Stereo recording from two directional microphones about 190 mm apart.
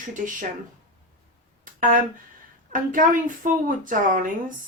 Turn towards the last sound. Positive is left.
turn(degrees=-45)  # may be behind; listen again after turning